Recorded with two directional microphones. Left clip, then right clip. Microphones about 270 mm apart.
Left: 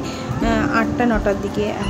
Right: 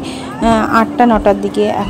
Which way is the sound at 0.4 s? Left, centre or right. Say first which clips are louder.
Right 7 dB; right.